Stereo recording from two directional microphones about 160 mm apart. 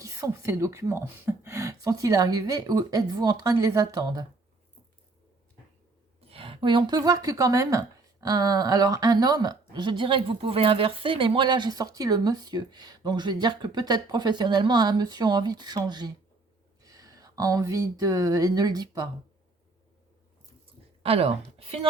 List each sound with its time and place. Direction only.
0.0 s speech: 20° right (ahead or behind)
6.1 s speech: 35° right (ahead or behind)
21.0 s a woman's voice: 40° right (ahead or behind)